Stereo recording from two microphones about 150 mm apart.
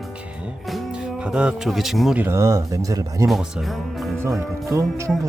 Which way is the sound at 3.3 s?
Centre (ahead or behind).